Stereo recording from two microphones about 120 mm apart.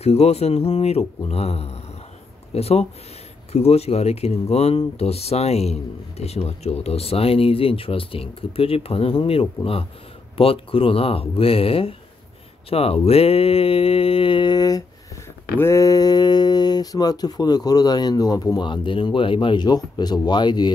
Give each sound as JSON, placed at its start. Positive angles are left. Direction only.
{"t": 0.0, "sound": "speech", "side_deg": 60}
{"t": 12.6, "sound": "mantra", "side_deg": 55}
{"t": 15.5, "sound": "speech", "side_deg": 25}